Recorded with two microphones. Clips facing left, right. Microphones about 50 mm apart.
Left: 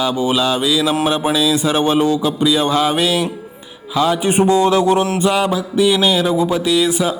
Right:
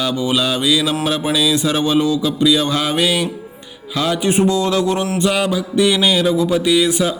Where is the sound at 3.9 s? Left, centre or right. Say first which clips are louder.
Left 3 dB; centre.